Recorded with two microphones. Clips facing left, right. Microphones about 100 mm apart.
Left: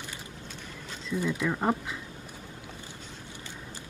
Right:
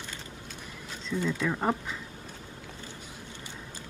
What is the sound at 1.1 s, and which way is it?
Speech, 15° left (ahead or behind).